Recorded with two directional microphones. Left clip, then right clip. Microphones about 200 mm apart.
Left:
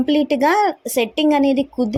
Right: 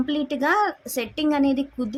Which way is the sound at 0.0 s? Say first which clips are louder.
Left 8 dB; 20° left (ahead or behind).